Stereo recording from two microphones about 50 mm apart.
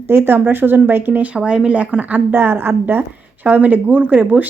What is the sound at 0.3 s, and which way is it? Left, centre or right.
Speech, right.